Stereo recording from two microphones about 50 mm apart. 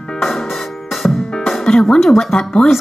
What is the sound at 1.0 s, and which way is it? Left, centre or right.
Music, centre.